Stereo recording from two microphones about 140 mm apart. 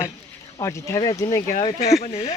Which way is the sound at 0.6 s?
20° left (ahead or behind).